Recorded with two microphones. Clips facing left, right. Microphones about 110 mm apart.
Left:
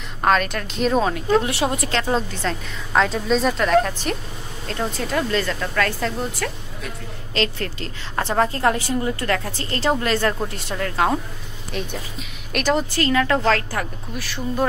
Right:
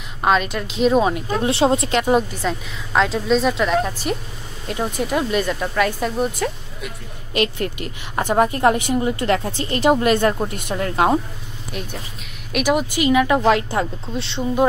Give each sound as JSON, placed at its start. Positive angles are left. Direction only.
{"t": 0.2, "sound": "a woman's voice", "side_deg": -5}
{"t": 1.1, "sound": "a woman's voice", "side_deg": -25}
{"t": 11.7, "sound": "a woman's voice", "side_deg": -5}